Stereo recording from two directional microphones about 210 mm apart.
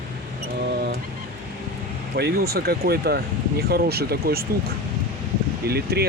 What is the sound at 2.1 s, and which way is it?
Speech, 50° right (ahead or behind).